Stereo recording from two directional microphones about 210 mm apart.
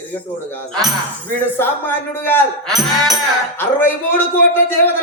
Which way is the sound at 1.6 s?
10° left (ahead or behind).